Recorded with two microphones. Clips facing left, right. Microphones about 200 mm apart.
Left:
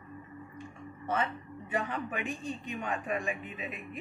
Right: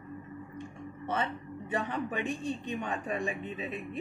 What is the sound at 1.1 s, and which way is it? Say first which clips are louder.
Speech: left 1 dB; 30° right (ahead or behind).